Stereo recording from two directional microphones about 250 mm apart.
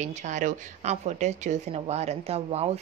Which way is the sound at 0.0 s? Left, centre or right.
Right.